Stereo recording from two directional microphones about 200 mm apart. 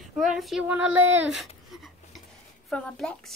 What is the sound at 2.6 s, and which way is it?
Child singing, 5° left (ahead or behind).